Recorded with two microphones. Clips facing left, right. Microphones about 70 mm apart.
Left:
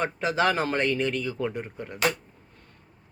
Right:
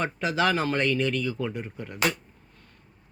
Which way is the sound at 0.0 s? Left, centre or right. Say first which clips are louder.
Left 1 dB; left.